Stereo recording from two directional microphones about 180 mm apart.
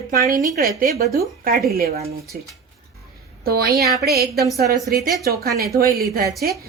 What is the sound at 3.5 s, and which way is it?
Speech, 60° right (ahead or behind).